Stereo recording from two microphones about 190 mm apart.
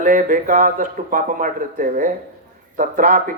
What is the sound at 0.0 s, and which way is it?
Speech, 45° right (ahead or behind).